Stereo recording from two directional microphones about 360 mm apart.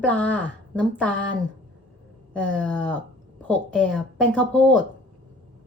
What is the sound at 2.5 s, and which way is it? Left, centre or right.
Speech, centre.